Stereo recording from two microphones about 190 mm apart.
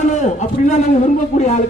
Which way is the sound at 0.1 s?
40° left (ahead or behind).